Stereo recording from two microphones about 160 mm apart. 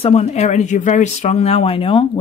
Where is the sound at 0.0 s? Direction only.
45° left (ahead or behind).